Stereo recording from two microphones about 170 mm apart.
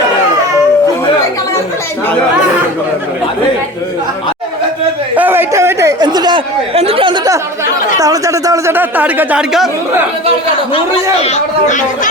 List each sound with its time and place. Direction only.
5.1 s chatter: 10° right (ahead or behind); by 7.3 s 30° right (ahead or behind)
7.9 s speech: 20° right (ahead or behind); by 9.6 s 5° right (ahead or behind)
10.8 s a man's voice: 35° left (ahead or behind)